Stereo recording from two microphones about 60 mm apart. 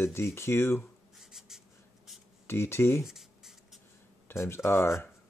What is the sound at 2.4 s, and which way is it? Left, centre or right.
Speech, left.